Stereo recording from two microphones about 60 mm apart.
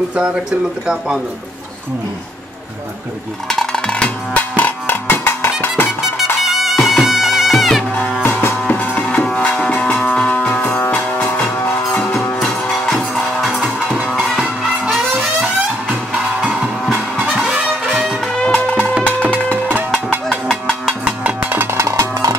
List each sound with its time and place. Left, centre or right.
0.8 s speech: centre
3.4 s music: centre
5.0 s music: left
6.4 s music: centre
8.2 s music: left
12.4 s music: centre
17.4 s music: centre
18.4 s music: left
21.2 s music: right
21.7 s music: right